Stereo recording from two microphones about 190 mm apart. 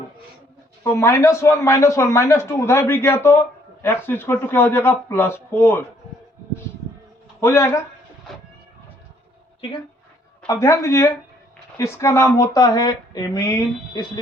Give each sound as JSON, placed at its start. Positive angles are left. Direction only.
{"t": 0.9, "sound": "a man's voice", "side_deg": 15}
{"t": 7.4, "sound": "a man's voice", "side_deg": 15}
{"t": 10.4, "sound": "a man's voice", "side_deg": 15}